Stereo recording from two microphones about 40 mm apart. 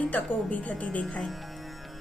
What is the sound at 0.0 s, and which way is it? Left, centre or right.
A woman's voice, left.